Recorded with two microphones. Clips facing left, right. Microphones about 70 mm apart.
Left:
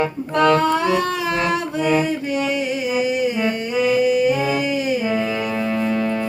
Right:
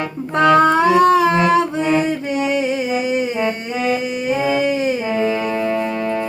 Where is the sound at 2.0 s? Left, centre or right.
Right.